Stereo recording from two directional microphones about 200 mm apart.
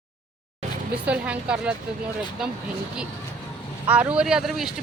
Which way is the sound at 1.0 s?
5° right (ahead or behind).